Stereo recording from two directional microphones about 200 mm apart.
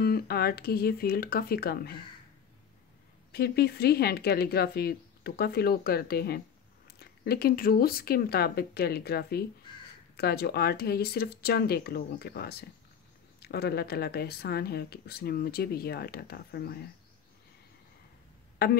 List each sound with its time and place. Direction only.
0.0 s speech: 50° left (ahead or behind)
3.3 s speech: 50° left (ahead or behind)
18.6 s speech: 55° left (ahead or behind)